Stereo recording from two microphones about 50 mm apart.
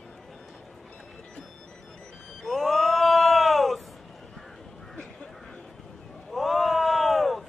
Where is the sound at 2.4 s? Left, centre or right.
Centre.